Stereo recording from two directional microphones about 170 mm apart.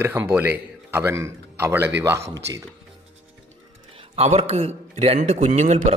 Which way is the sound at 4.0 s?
35° right (ahead or behind).